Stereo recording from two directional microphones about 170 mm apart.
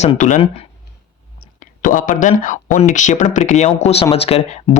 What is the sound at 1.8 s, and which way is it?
Speech, 50° left (ahead or behind).